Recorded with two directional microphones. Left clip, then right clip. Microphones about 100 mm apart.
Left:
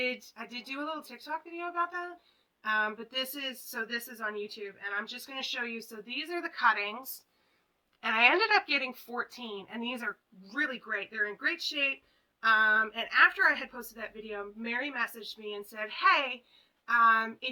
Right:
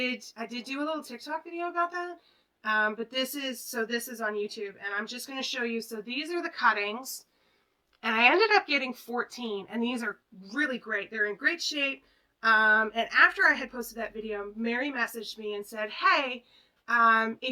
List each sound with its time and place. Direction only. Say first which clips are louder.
0.0 s a woman's voice: right 1 dB; 35° left (ahead or behind)